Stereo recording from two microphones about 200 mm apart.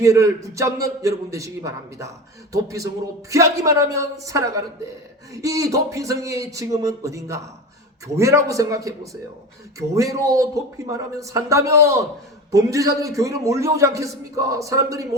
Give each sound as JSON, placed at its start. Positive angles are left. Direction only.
{"t": 0.0, "sound": "a man's voice", "side_deg": -15}